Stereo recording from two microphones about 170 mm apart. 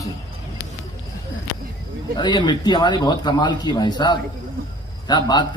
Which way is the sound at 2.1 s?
25° left (ahead or behind).